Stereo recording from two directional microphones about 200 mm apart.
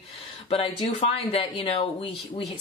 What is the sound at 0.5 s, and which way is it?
Speech, 30° left (ahead or behind).